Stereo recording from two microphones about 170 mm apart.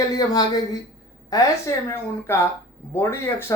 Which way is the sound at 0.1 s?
20° left (ahead or behind).